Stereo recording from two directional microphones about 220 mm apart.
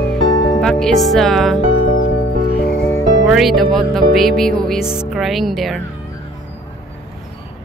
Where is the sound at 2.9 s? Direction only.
Centre (ahead or behind).